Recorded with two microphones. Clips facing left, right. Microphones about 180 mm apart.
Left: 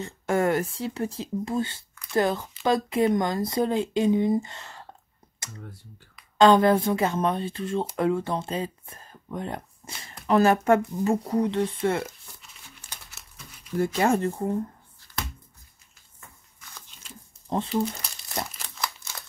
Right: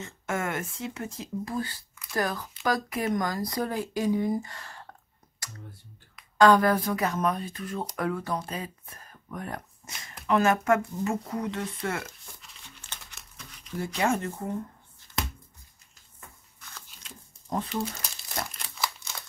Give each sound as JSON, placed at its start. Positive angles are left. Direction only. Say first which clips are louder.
{"t": 0.0, "sound": "speech", "louder": "left 7 dB", "side_deg": 35}
{"t": 5.4, "sound": "computer keyboard", "louder": "left 3 dB", "side_deg": 25}
{"t": 6.3, "sound": "speech", "louder": "left 3 dB", "side_deg": 25}
{"t": 12.9, "sound": "crumpling", "louder": "even", "side_deg": 5}
{"t": 13.9, "sound": "speech", "louder": "left 3 dB", "side_deg": 35}
{"t": 16.5, "sound": "a sound", "louder": "left 1 dB", "side_deg": 5}
{"t": 18.0, "sound": "crumpling", "louder": "left 2 dB", "side_deg": 0}